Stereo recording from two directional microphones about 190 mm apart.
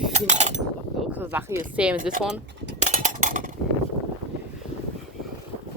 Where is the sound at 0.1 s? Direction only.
40° right (ahead or behind).